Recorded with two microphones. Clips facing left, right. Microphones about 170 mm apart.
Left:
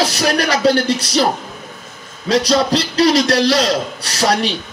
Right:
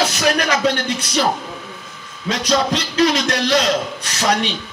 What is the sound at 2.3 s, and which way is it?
Music, 35° left (ahead or behind).